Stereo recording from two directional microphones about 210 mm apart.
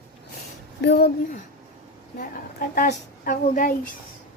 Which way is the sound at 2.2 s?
40° left (ahead or behind).